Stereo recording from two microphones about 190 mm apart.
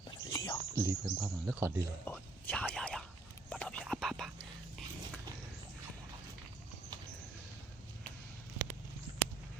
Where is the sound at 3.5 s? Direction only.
5° left (ahead or behind).